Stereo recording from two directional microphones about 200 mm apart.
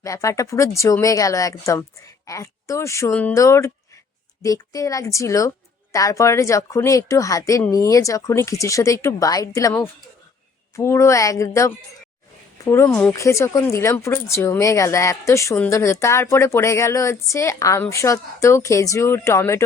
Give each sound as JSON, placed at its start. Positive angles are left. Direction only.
{"t": 0.0, "sound": "speech", "side_deg": 15}
{"t": 12.9, "sound": "speech", "side_deg": 5}